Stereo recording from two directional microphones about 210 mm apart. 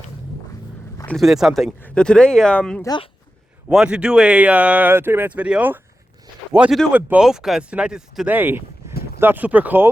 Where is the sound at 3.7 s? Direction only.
5° right (ahead or behind).